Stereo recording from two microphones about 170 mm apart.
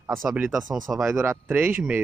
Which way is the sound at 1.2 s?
15° right (ahead or behind).